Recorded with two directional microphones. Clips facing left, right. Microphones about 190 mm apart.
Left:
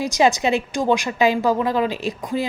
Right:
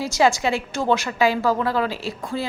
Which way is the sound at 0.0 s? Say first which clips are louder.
Left 1 dB; 20° left (ahead or behind).